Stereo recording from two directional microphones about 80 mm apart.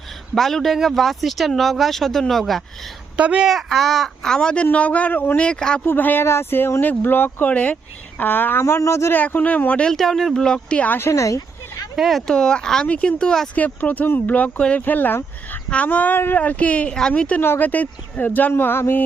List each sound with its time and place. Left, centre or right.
0.3 s speech: centre
3.2 s speech: centre
3.4 s speech: centre; by 5.4 s left
5.4 s speech: centre
5.8 s speech: left
9.1 s speech: left
9.9 s speech: centre
11.0 s a sound: left
11.9 s speech: centre
13.6 s speech: left